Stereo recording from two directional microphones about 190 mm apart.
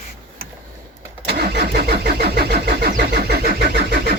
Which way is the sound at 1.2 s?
55° right (ahead or behind).